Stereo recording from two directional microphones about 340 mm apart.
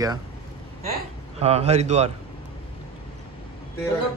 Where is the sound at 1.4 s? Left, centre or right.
Centre.